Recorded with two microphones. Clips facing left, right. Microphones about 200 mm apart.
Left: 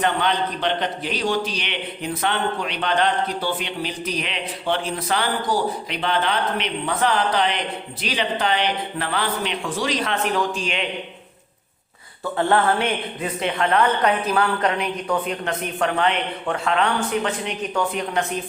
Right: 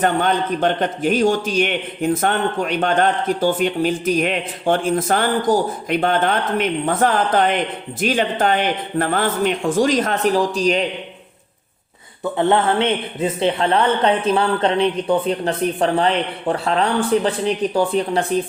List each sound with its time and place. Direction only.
0.0 s a man's voice: 45° right (ahead or behind)
12.4 s speech: 20° right (ahead or behind)